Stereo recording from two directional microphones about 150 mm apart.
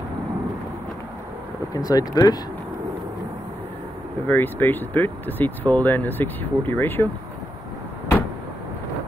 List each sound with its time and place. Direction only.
1.7 s speech: 25° left (ahead or behind)
4.3 s speech: 15° left (ahead or behind)